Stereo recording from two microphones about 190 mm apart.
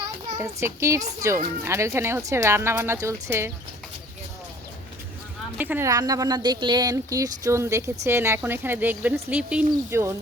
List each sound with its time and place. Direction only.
0.3 s speech: 15° right (ahead or behind)
5.5 s speech: 10° right (ahead or behind)